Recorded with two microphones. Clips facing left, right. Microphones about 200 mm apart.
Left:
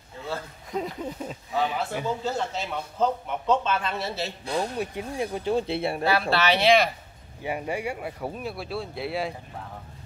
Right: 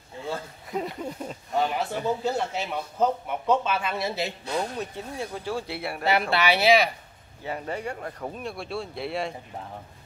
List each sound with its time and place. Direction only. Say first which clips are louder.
0.7 s speech: even; centre (ahead or behind)
2.2 s a man's voice: right 2 dB; 10° right (ahead or behind)
4.5 s speech: left 5 dB; 10° left (ahead or behind)
6.3 s a man's voice: even; 10° right (ahead or behind)
7.4 s speech: left 2 dB; 10° left (ahead or behind)